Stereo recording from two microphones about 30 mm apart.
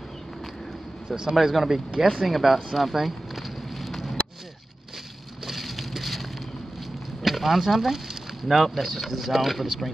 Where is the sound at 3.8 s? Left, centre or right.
Centre.